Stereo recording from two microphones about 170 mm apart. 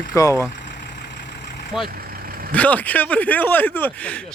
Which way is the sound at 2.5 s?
10° left (ahead or behind).